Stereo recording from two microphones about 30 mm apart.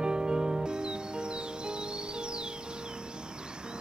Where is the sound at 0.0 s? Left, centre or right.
Right.